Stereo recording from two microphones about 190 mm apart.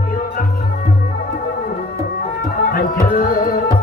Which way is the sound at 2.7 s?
50° left (ahead or behind).